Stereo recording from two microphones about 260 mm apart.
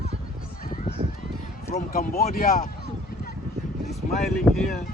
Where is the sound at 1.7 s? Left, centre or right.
Left.